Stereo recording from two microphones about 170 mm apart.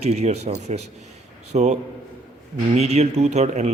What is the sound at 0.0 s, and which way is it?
Speech, 40° right (ahead or behind).